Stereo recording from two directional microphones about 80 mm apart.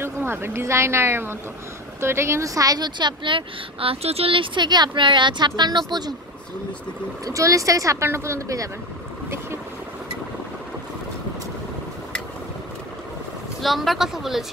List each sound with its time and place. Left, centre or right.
0.0 s a woman's voice: right
7.2 s a woman's voice: right
13.6 s speech: centre